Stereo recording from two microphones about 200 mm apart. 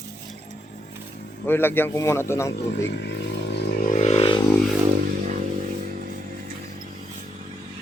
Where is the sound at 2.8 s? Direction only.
60° left (ahead or behind).